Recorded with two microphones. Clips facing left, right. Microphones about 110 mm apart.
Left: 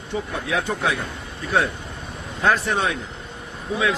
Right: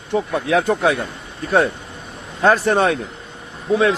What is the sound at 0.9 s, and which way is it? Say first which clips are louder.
Speech: right 3 dB; 30° right (ahead or behind).